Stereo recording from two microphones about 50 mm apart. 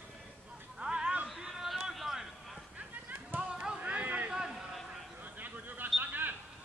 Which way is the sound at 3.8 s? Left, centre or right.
Right.